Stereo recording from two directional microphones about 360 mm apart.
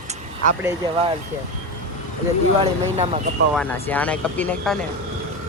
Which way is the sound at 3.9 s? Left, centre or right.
Centre.